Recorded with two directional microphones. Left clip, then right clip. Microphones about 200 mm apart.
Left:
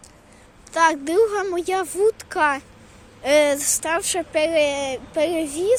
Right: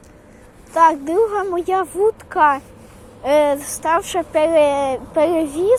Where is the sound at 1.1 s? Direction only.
30° left (ahead or behind).